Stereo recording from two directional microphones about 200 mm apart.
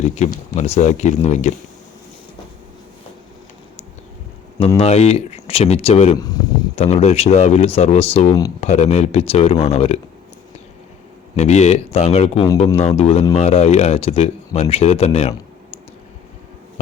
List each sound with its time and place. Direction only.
0.2 s speech: 35° left (ahead or behind)
4.8 s speech: 30° left (ahead or behind)
6.1 s speech: 20° left (ahead or behind)
6.7 s speech: 35° left (ahead or behind)
11.3 s speech: 35° left (ahead or behind)